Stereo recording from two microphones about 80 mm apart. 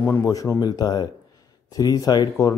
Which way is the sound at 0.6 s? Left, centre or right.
Left.